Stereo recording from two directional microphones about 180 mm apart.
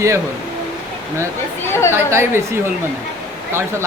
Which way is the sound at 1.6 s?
15° left (ahead or behind).